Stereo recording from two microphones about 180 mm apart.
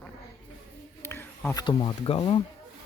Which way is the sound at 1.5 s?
25° left (ahead or behind).